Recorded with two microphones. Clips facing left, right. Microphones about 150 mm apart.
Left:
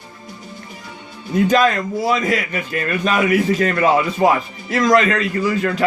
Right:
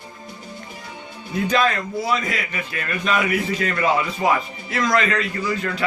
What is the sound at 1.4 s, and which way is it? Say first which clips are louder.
A man's voice: left 4 dB; 45° left (ahead or behind).